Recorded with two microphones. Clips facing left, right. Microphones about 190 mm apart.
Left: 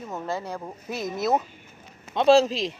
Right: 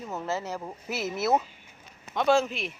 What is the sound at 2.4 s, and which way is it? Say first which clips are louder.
Speech: left 6 dB; 90° left.